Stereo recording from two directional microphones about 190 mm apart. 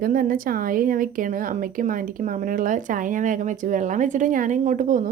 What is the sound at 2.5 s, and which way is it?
A woman's voice, 45° right (ahead or behind).